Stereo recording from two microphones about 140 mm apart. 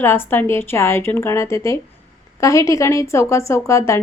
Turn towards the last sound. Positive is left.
turn(degrees=20)  # may be behind; listen again after turning